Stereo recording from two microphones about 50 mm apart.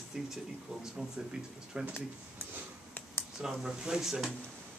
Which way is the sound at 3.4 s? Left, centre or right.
Centre.